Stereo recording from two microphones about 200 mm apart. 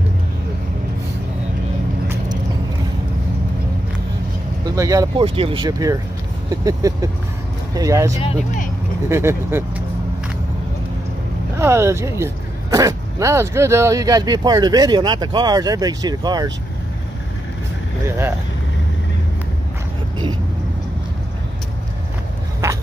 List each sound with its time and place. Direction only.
4.7 s speech: 15° right (ahead or behind)
6.5 s vehicle: 15° right (ahead or behind)
7.7 s speech: 15° right (ahead or behind)
11.5 s speech: 15° right (ahead or behind)
18.0 s speech: 10° right (ahead or behind)